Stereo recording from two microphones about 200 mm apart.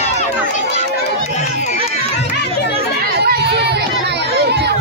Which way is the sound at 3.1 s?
55° right (ahead or behind).